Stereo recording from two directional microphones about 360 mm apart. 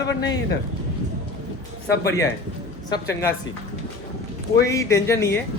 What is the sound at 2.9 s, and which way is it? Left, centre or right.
Speech, centre.